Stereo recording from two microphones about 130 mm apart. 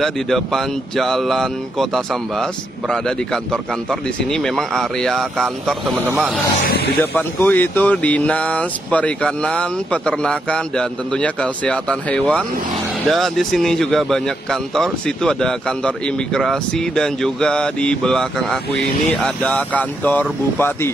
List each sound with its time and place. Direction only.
0.0 s speech: 5° left (ahead or behind)
4.3 s speech: 5° left (ahead or behind)
7.0 s speech: 15° left (ahead or behind)